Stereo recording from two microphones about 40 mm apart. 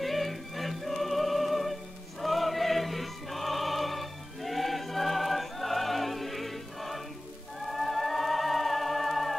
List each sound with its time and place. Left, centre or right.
0.0 s music: centre